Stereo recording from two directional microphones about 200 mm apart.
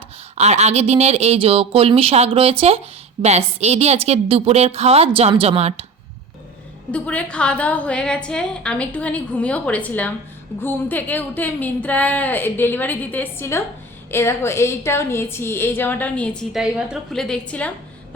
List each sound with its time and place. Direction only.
0.3 s speech: 35° right (ahead or behind)
6.9 s a woman's voice: 5° left (ahead or behind)